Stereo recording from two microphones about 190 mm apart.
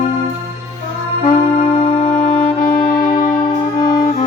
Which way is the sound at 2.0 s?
45° left (ahead or behind).